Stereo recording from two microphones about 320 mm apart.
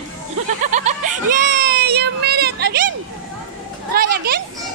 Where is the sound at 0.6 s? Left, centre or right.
Right.